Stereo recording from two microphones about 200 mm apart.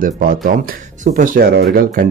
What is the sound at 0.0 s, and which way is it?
Speech, 45° right (ahead or behind).